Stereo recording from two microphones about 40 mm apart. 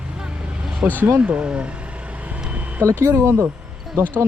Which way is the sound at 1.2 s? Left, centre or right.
Right.